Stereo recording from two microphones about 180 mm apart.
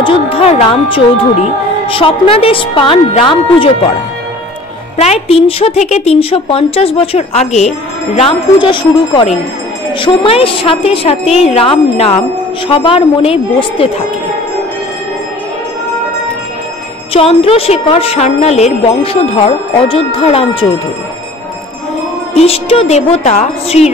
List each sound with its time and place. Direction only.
0.0 s speech: 30° left (ahead or behind)
4.9 s a woman's voice: 35° left (ahead or behind)
17.1 s a woman's voice: 30° left (ahead or behind)
22.3 s a woman's voice: 35° left (ahead or behind)